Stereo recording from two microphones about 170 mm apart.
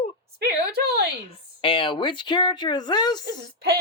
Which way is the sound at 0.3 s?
70° right (ahead or behind).